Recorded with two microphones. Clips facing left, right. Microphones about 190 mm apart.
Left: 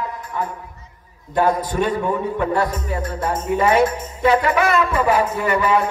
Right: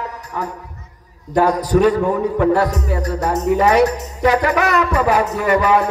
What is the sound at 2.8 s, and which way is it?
Music, 40° right (ahead or behind).